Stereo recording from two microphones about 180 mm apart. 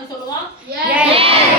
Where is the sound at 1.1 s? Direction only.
30° right (ahead or behind).